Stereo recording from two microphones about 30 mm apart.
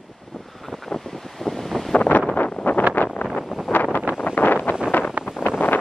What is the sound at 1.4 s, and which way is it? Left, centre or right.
Wind noise, centre.